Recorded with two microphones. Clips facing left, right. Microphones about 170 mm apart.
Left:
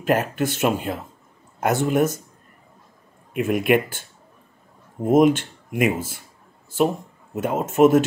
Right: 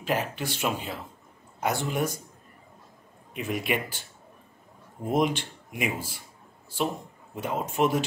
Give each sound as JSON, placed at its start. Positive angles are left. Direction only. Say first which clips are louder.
{"t": 0.0, "sound": "speech", "louder": "left 8 dB", "side_deg": 50}
{"t": 3.3, "sound": "speech", "louder": "left 10 dB", "side_deg": 55}
{"t": 5.0, "sound": "speech", "louder": "left 9 dB", "side_deg": 50}
{"t": 7.3, "sound": "speech", "louder": "left 8 dB", "side_deg": 50}